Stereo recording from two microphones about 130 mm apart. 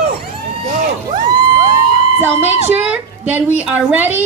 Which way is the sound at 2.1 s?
15° right (ahead or behind).